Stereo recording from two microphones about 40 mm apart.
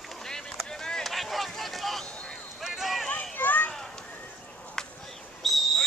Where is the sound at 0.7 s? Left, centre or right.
Centre.